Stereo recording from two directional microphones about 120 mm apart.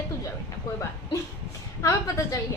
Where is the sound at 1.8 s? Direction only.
30° left (ahead or behind).